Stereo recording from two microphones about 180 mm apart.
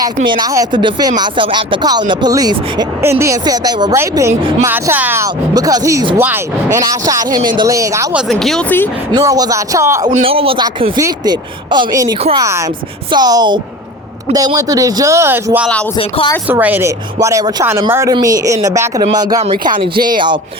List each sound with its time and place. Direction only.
0.4 s speech: 20° right (ahead or behind)
8.1 s speech: centre (ahead or behind)
9.1 s speech: 20° right (ahead or behind)
10.1 s a man's voice: 30° right (ahead or behind); by 15.7 s 10° right (ahead or behind)
16.0 s speech: 30° left (ahead or behind)
16.5 s speech: 10° right (ahead or behind); by 20.4 s 25° right (ahead or behind)